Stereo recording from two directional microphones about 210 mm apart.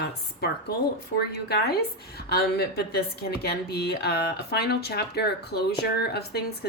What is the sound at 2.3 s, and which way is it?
A woman's voice, 50° left (ahead or behind).